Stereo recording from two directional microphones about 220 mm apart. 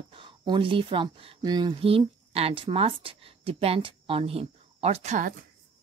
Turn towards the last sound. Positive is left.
turn(degrees=-30)  # may be behind; listen again after turning